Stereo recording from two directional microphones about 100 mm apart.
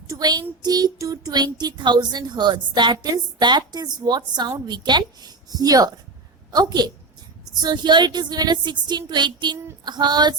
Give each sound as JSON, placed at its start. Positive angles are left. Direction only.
{"t": 0.1, "sound": "child singing", "side_deg": -40}